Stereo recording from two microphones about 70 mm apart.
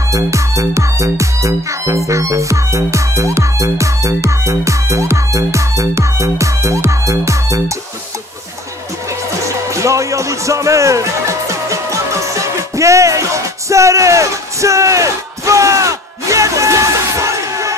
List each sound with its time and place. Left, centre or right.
0.1 s music: right
9.8 s music: right